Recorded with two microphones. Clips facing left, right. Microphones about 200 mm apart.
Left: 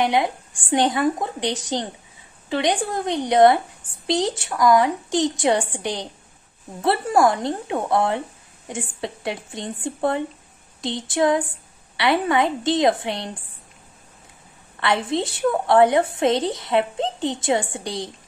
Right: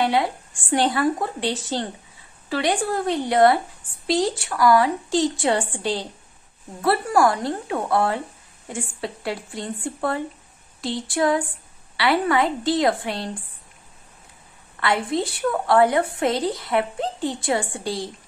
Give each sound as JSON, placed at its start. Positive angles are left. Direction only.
{"t": 0.0, "sound": "a woman's voice", "side_deg": 20}
{"t": 14.8, "sound": "a woman's voice", "side_deg": 25}